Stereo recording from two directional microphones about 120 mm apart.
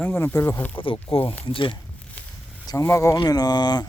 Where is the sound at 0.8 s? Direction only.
50° left (ahead or behind).